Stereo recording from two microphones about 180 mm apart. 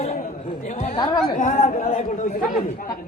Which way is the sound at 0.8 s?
30° left (ahead or behind).